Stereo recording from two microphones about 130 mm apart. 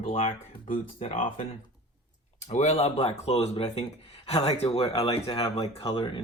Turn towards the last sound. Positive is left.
turn(degrees=40)  # may be behind; listen again after turning